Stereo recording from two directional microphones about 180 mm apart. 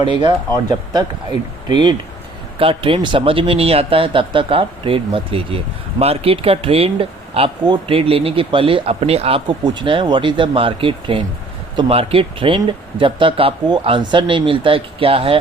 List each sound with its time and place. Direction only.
0.1 s speech: 25° right (ahead or behind)